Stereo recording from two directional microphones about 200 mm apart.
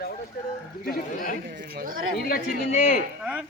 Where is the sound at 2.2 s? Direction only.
45° left (ahead or behind).